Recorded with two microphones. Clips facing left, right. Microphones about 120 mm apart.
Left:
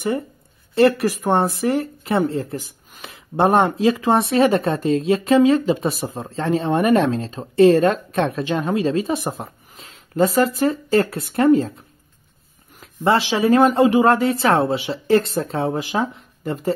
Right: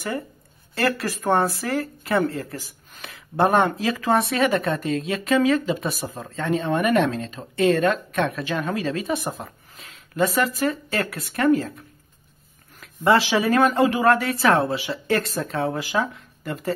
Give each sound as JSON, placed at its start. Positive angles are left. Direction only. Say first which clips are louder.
{"t": 0.7, "sound": "speech", "louder": "left 8 dB", "side_deg": 20}
{"t": 12.8, "sound": "speech", "louder": "even", "side_deg": 25}